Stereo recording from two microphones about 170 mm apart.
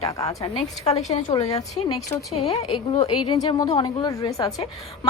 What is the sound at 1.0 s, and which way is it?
A woman's voice, 45° left (ahead or behind).